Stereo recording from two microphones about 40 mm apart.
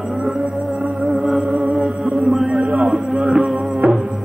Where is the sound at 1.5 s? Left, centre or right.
Right.